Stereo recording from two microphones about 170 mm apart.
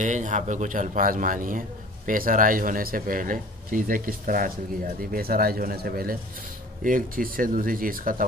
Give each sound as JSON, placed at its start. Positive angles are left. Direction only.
{"t": 0.0, "sound": "speech", "side_deg": -45}